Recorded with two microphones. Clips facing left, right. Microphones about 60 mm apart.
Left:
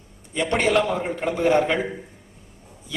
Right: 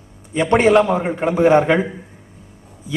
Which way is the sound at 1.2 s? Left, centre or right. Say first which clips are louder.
Right 6 dB; centre.